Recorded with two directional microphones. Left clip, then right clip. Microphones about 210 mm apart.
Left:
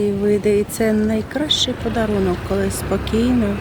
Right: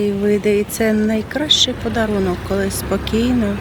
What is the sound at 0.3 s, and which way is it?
Speech, 5° left (ahead or behind).